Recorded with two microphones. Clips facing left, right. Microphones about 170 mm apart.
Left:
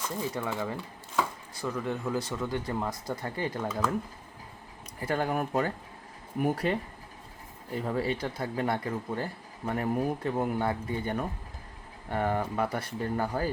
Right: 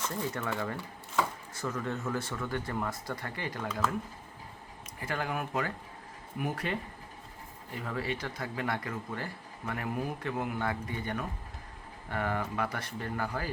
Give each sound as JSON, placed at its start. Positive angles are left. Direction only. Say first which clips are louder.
{"t": 0.1, "sound": "speech", "louder": "left 2 dB", "side_deg": 15}
{"t": 3.3, "sound": "speech", "louder": "left 5 dB", "side_deg": 30}
{"t": 4.9, "sound": "speech", "louder": "left 5 dB", "side_deg": 35}
{"t": 7.8, "sound": "speech", "louder": "left 5 dB", "side_deg": 30}